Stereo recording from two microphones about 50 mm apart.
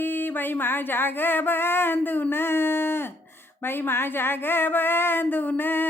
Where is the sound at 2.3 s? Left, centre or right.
Left.